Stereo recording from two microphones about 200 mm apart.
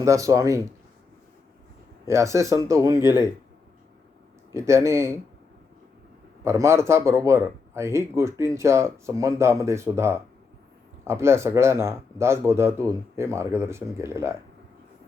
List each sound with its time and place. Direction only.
0.0 s speech: 15° right (ahead or behind)
2.0 s speech: 15° right (ahead or behind)
4.5 s speech: 15° right (ahead or behind)
6.4 s speech: 15° right (ahead or behind)